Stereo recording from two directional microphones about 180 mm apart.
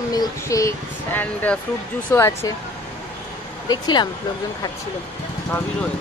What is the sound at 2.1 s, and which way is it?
Speech, 15° left (ahead or behind).